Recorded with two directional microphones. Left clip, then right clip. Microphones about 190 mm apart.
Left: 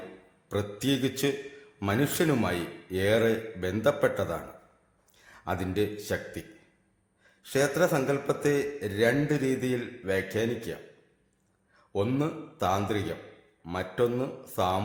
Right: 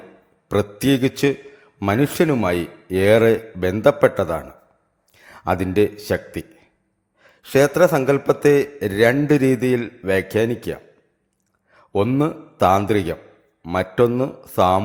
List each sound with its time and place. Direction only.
0.4 s a man's voice: 40° right (ahead or behind)
11.7 s a sound: 40° right (ahead or behind)
12.2 s a man's voice: 40° right (ahead or behind)